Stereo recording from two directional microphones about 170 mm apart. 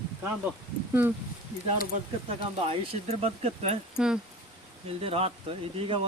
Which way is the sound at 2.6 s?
35° right (ahead or behind).